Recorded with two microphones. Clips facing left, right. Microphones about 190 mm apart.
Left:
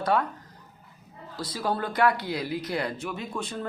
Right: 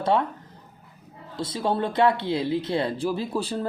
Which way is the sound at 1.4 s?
25° right (ahead or behind).